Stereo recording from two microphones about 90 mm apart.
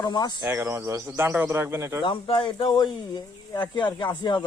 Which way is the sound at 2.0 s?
65° left (ahead or behind).